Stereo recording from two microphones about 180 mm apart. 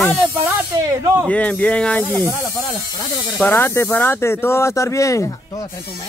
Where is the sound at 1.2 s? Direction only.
5° left (ahead or behind).